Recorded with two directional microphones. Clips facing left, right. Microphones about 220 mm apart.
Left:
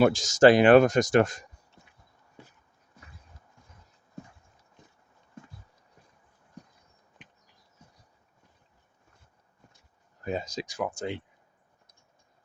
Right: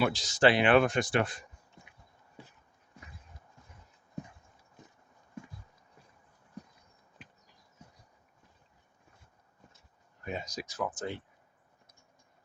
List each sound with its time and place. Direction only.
0.0 s speech: 45° left (ahead or behind)
10.2 s speech: 30° left (ahead or behind)
10.7 s speech: 15° left (ahead or behind)